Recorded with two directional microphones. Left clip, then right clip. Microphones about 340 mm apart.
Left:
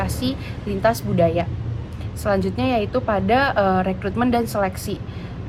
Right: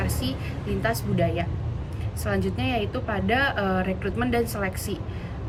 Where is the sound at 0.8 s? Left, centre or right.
Centre.